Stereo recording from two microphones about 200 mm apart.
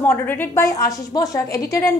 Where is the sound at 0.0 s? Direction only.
10° left (ahead or behind).